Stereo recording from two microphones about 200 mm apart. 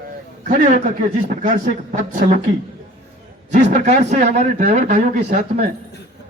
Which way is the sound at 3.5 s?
40° right (ahead or behind).